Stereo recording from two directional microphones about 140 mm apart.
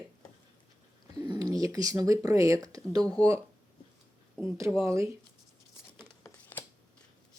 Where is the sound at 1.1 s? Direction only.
30° right (ahead or behind).